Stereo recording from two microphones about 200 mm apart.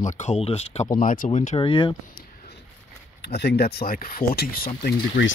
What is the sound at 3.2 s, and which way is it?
Speech, 55° left (ahead or behind).